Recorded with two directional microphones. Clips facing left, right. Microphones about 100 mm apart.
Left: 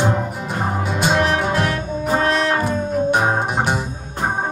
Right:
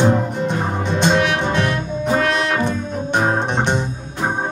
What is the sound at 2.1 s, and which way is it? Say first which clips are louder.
Brass instrument: left 1 dB; 35° left (ahead or behind).